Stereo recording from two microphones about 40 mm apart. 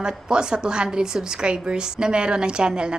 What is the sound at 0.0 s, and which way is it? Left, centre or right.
A woman's voice, right.